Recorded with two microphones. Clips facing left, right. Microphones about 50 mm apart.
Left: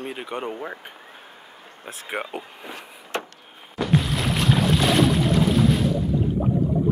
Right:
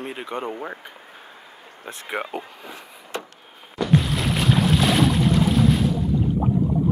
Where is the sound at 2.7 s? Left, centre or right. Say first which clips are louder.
Left 3 dB; left.